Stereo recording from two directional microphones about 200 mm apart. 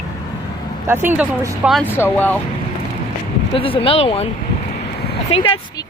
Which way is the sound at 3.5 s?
25° left (ahead or behind).